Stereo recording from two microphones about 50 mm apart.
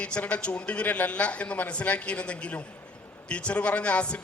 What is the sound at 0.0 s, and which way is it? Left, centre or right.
A man's voice, left.